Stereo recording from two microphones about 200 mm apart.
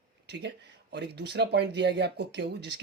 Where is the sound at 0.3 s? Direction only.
60° right (ahead or behind).